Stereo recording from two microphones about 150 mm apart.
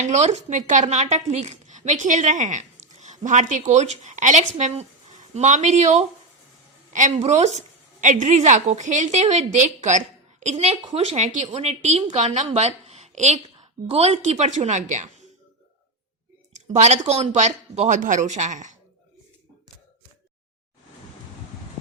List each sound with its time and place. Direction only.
0.0 s a woman's voice: 50° right (ahead or behind)
16.5 s speech: 50° right (ahead or behind)